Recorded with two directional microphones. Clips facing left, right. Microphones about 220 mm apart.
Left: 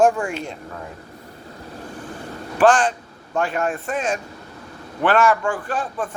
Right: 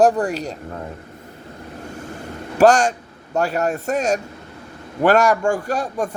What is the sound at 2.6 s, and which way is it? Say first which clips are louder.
A man's voice: right 2 dB; 40° right (ahead or behind).